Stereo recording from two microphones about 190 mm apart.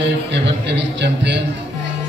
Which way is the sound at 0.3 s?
65° right (ahead or behind).